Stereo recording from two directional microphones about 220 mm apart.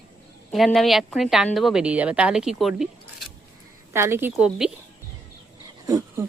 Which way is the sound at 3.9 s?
10° right (ahead or behind).